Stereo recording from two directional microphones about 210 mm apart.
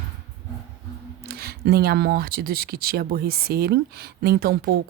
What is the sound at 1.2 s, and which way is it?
A woman's voice, 45° right (ahead or behind).